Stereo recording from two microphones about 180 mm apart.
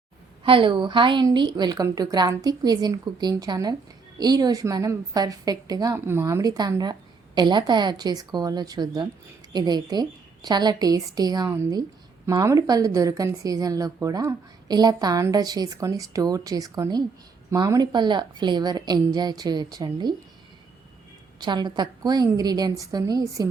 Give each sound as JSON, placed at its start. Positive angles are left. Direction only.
{"t": 0.4, "sound": "a woman's voice", "side_deg": -30}
{"t": 21.3, "sound": "a woman's voice", "side_deg": -25}